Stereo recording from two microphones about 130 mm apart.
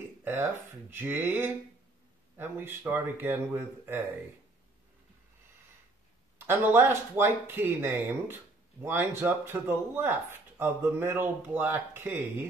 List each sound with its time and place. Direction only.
0.2 s speech: 15° right (ahead or behind)
6.3 s speech: 15° right (ahead or behind)